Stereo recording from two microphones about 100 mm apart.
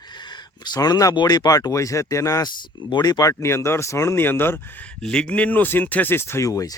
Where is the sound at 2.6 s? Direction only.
50° left (ahead or behind); by 4.9 s 20° left (ahead or behind).